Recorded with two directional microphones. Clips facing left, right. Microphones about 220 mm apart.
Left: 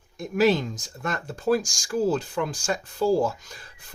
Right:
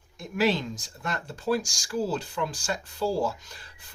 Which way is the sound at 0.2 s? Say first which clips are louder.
Left 5 dB; 45° left (ahead or behind).